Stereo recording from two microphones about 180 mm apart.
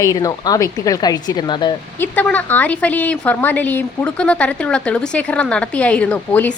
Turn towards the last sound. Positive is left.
turn(degrees=10)  # may be behind; listen again after turning